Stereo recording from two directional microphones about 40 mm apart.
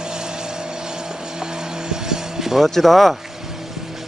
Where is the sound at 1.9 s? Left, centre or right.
Centre.